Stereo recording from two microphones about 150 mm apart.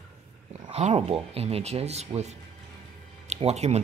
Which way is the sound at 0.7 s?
45° right (ahead or behind).